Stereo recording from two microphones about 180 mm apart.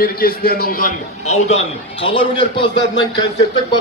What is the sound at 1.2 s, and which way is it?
A man's voice, 35° left (ahead or behind).